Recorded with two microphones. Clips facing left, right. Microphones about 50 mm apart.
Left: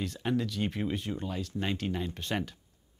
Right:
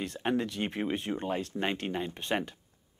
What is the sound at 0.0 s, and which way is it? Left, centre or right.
Speech, right.